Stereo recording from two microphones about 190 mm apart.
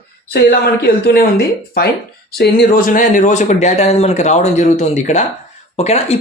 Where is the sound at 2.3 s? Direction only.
60° left (ahead or behind).